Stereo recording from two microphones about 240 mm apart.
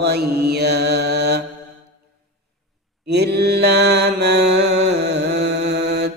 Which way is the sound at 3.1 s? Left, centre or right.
Right.